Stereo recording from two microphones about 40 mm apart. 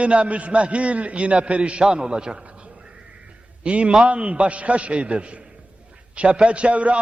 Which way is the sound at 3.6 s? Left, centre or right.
Right.